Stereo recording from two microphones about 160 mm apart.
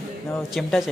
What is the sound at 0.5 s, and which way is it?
Speech, centre (ahead or behind).